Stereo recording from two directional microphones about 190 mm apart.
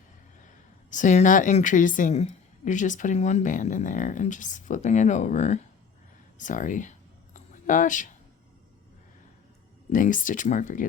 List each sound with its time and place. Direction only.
0.9 s a woman's voice: 40° left (ahead or behind)
7.3 s a sound: 40° left (ahead or behind)
9.9 s speech: 45° left (ahead or behind)